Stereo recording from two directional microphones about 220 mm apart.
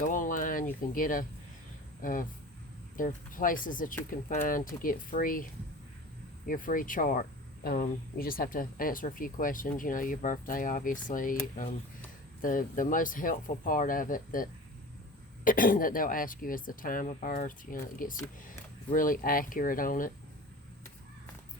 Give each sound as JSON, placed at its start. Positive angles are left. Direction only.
{"t": 0.0, "sound": "a sound", "side_deg": 35}
{"t": 2.0, "sound": "speech", "side_deg": 40}
{"t": 12.4, "sound": "speech", "side_deg": 40}
{"t": 15.4, "sound": "speech", "side_deg": 40}